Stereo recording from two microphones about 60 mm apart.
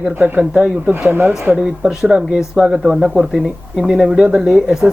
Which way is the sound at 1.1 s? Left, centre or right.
Right.